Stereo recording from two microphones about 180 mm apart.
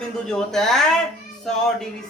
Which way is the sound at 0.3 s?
5° left (ahead or behind).